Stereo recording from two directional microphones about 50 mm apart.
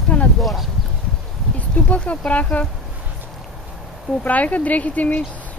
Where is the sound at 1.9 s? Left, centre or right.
Left.